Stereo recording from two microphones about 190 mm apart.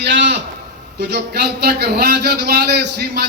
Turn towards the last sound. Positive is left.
turn(degrees=-60)  # may be behind; listen again after turning